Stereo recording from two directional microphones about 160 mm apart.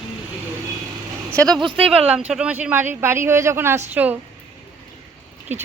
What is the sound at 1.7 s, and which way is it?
Speech, 5° right (ahead or behind).